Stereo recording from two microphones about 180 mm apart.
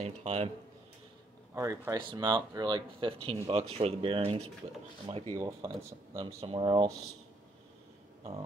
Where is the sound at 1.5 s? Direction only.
15° right (ahead or behind).